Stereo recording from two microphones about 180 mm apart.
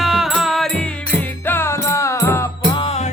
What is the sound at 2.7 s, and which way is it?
Music, 35° left (ahead or behind).